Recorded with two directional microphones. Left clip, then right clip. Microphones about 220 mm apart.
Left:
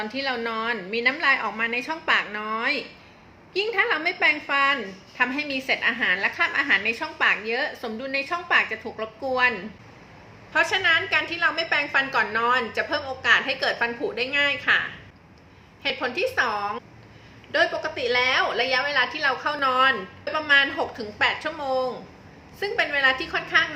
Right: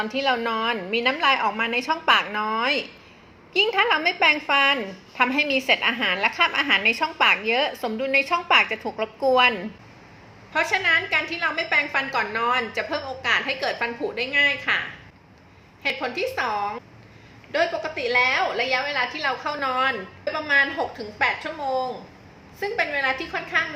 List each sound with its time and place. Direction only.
0.0 s a woman's voice: 15° right (ahead or behind)
10.5 s a woman's voice: centre (ahead or behind)
15.8 s a woman's voice: centre (ahead or behind)